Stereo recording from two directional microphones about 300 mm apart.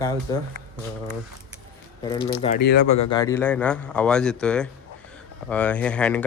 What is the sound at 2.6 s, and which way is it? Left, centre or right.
Speech, left.